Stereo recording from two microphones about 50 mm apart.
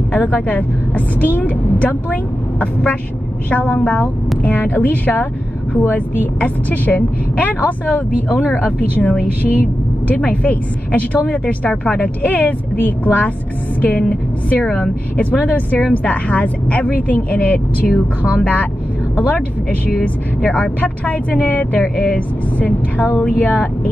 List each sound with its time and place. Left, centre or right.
0.1 s a woman's voice: left
15.1 s a woman's voice: left